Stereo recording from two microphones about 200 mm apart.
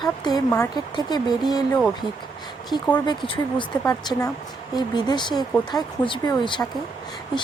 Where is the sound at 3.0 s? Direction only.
25° left (ahead or behind).